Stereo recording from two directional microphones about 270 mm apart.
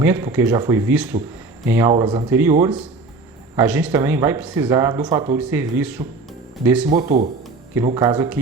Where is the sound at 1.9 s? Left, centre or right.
Centre.